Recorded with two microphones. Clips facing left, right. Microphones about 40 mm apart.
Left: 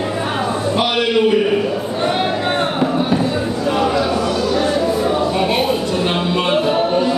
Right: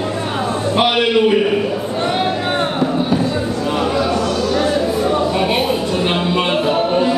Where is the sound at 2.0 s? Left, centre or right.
Centre.